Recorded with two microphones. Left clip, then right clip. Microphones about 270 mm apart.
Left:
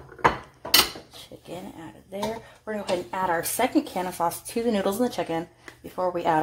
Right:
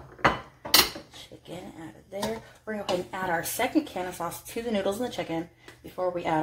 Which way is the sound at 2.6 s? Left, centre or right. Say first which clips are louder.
Left 2 dB; left.